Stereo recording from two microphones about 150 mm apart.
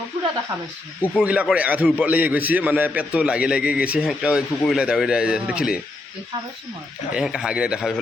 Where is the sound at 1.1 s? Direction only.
10° right (ahead or behind).